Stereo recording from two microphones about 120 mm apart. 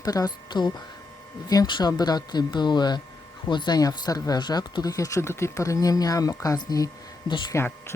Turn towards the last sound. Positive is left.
turn(degrees=20)  # may be behind; listen again after turning